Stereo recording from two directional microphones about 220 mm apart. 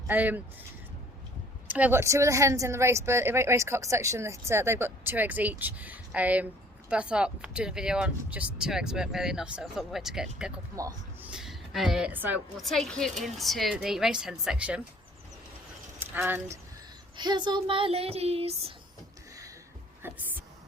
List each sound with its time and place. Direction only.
0.1 s a woman's voice: 10° right (ahead or behind)
1.6 s a woman's voice: 5° right (ahead or behind)
16.0 s speech: 10° right (ahead or behind)
17.2 s child singing: 20° right (ahead or behind)
20.0 s a sound: 10° right (ahead or behind)